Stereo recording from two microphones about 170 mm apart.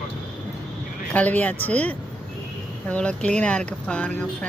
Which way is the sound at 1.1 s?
10° left (ahead or behind).